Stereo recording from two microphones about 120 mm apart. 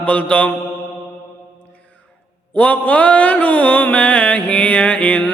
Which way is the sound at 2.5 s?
10° left (ahead or behind).